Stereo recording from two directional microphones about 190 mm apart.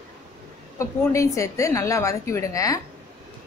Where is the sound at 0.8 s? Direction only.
15° left (ahead or behind).